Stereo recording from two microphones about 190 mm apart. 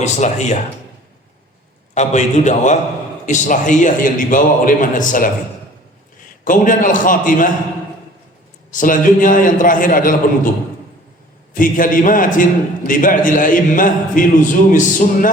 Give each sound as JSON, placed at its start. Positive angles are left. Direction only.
{"t": 0.0, "sound": "a man's voice", "side_deg": 35}
{"t": 2.0, "sound": "a man's voice", "side_deg": 40}
{"t": 6.4, "sound": "a man's voice", "side_deg": 45}
{"t": 8.7, "sound": "a man's voice", "side_deg": 45}
{"t": 11.5, "sound": "a man's voice", "side_deg": 45}